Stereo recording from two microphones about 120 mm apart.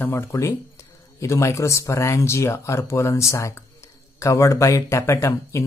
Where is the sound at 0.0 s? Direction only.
25° left (ahead or behind).